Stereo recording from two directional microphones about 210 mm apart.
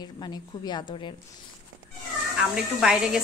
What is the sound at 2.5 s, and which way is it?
Speech, centre (ahead or behind).